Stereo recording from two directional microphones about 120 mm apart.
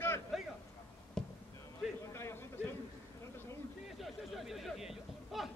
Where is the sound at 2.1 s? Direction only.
20° left (ahead or behind).